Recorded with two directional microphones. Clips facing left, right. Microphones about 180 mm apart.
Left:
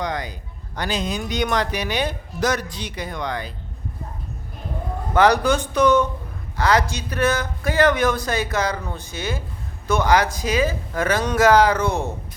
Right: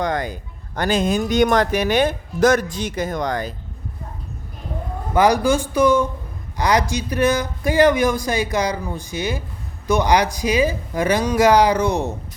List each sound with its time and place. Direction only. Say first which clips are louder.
0.0 s speech: right 4 dB; 50° right (ahead or behind)
5.1 s a man's voice: right 1 dB; 10° right (ahead or behind)